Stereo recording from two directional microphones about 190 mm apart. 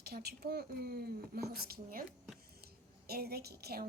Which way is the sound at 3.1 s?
55° right (ahead or behind).